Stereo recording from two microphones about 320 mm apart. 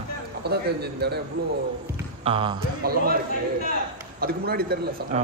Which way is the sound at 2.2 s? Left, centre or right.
Centre.